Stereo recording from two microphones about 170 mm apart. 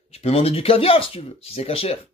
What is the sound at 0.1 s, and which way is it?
Speech, 35° left (ahead or behind).